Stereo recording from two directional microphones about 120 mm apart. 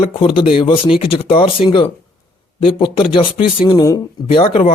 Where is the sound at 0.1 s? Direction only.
50° left (ahead or behind).